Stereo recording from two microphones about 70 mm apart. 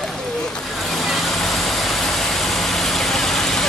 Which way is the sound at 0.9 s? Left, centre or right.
Centre.